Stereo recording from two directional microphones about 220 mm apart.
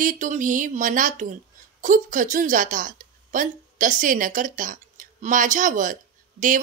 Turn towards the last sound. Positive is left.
turn(degrees=-35)  # may be behind; listen again after turning